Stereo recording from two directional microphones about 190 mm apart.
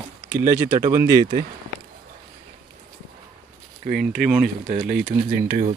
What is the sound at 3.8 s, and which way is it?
Speech, 50° right (ahead or behind).